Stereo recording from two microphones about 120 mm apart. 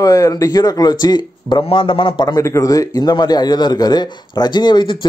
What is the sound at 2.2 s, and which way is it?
A man's voice, 25° left (ahead or behind).